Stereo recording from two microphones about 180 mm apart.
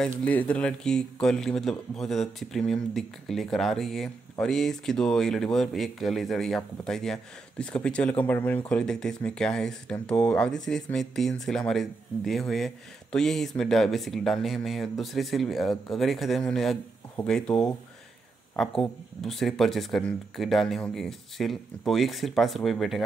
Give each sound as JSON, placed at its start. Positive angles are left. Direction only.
{"t": 0.2, "sound": "speech", "side_deg": 5}